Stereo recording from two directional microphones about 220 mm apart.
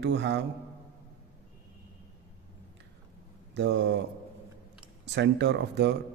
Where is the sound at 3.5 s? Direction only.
50° right (ahead or behind).